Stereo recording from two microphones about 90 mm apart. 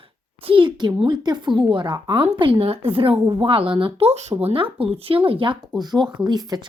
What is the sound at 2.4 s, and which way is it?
A woman's voice, 90° right.